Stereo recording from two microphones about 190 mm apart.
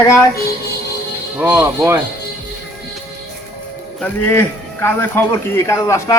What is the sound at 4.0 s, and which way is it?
A man's voice, 10° left (ahead or behind).